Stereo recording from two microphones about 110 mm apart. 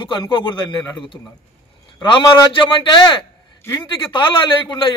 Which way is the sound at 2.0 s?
40° left (ahead or behind).